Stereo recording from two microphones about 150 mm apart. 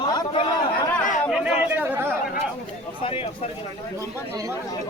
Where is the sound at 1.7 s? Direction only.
15° right (ahead or behind).